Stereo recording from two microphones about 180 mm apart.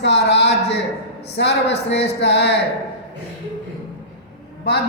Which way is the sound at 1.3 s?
75° left (ahead or behind).